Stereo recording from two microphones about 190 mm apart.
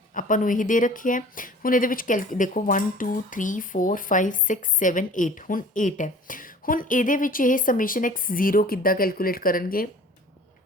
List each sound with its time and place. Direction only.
0.1 s speech: 45° left (ahead or behind)